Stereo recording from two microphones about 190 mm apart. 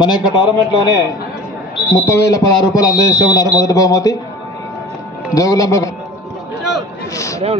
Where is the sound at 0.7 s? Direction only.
20° left (ahead or behind).